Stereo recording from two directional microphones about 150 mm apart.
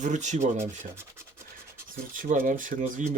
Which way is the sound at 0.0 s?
55° right (ahead or behind).